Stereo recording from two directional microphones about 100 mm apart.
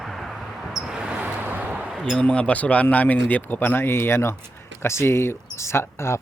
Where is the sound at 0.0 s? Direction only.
Centre (ahead or behind).